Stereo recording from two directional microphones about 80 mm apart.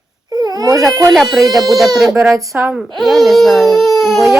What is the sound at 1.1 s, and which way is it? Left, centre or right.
Speech, centre.